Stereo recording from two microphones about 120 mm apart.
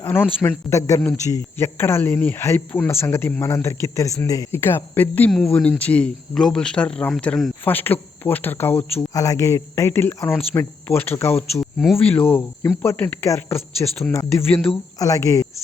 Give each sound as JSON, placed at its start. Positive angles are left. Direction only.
{"t": 0.0, "sound": "speech", "side_deg": 15}
{"t": 5.3, "sound": "speech", "side_deg": 5}
{"t": 7.6, "sound": "speech", "side_deg": 15}
{"t": 9.0, "sound": "speech", "side_deg": 30}
{"t": 11.6, "sound": "speech", "side_deg": 0}
{"t": 12.0, "sound": "speech", "side_deg": 15}